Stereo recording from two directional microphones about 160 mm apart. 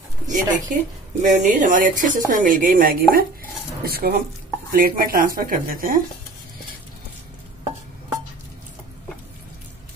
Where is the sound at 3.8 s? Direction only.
70° right (ahead or behind).